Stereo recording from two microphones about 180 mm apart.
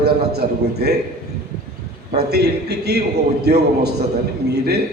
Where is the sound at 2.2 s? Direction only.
65° right (ahead or behind).